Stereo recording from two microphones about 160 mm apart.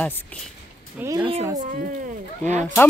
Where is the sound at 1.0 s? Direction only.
20° right (ahead or behind).